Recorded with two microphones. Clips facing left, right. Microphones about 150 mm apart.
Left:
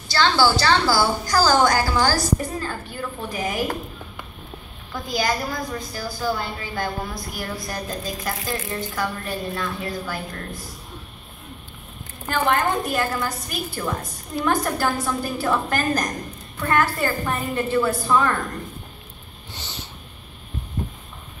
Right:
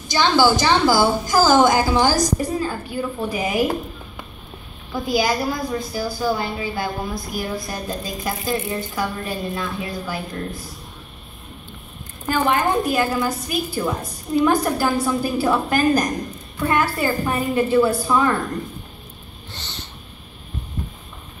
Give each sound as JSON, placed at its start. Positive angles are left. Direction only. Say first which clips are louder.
{"t": 0.1, "sound": "a woman's voice", "louder": "right 2 dB", "side_deg": -15}
{"t": 4.9, "sound": "a woman's voice", "louder": "right 4 dB", "side_deg": -5}
{"t": 12.3, "sound": "a woman's voice", "louder": "right 2 dB", "side_deg": -5}
{"t": 19.5, "sound": "a sound", "louder": "even", "side_deg": 10}